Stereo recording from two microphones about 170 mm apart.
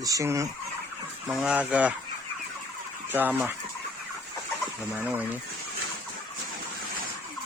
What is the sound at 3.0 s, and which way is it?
Speech, 10° right (ahead or behind).